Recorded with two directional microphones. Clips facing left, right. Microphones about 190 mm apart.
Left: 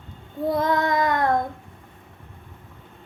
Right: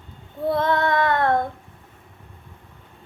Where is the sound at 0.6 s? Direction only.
15° left (ahead or behind).